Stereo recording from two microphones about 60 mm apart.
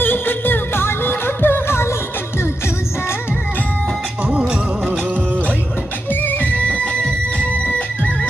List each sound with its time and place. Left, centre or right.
0.0 s music: left
4.3 s music: centre
6.1 s music: left